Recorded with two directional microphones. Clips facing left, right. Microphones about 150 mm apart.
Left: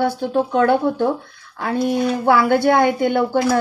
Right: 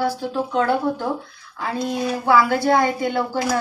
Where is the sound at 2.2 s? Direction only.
60° left (ahead or behind).